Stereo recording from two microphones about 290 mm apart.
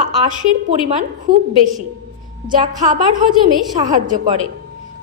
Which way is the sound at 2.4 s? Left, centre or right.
Centre.